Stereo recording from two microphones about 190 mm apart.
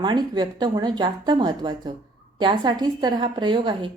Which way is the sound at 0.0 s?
25° right (ahead or behind).